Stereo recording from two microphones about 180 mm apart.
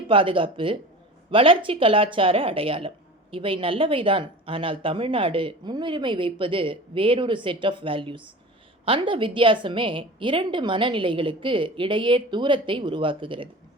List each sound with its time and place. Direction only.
0.1 s speech: 30° right (ahead or behind)